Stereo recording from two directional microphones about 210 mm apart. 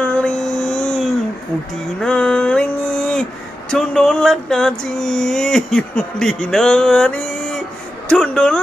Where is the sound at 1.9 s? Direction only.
5° left (ahead or behind).